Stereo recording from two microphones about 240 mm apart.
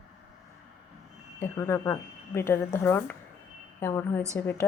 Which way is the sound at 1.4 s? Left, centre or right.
Centre.